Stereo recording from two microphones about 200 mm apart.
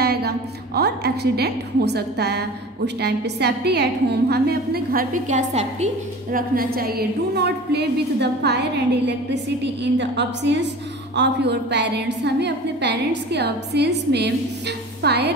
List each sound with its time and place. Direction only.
0.0 s a woman's voice: 55° right (ahead or behind); by 5.9 s 35° right (ahead or behind)
6.3 s a woman's voice: 45° right (ahead or behind)